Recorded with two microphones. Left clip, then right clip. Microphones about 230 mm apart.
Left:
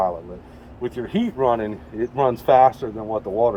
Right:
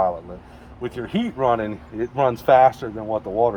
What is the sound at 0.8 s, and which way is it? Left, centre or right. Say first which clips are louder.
Speech: left 1 dB; right.